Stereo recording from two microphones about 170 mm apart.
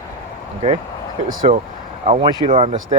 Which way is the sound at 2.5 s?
45° right (ahead or behind).